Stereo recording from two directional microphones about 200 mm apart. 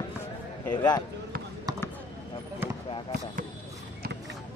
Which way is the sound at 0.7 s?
20° left (ahead or behind).